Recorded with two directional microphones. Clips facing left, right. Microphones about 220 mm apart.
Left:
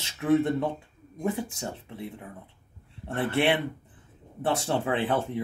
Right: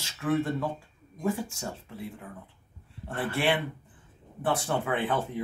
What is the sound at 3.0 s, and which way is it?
Speech, 25° left (ahead or behind).